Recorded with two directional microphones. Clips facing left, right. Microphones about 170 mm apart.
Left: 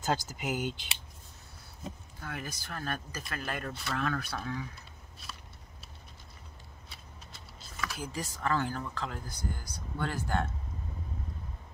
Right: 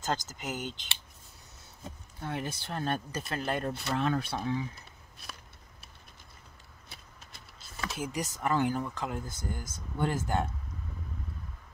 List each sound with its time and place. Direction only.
0.0 s speech: 10° left (ahead or behind)
2.1 s speech: 25° right (ahead or behind)
7.7 s speech: 25° right (ahead or behind)